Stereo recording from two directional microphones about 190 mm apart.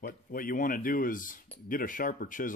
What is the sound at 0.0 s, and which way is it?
Speech, 50° left (ahead or behind).